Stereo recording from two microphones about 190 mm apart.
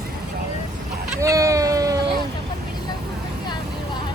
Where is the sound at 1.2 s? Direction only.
15° right (ahead or behind).